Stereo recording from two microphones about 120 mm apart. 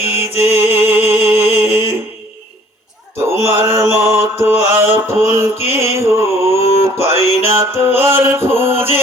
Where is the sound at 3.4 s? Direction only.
20° right (ahead or behind).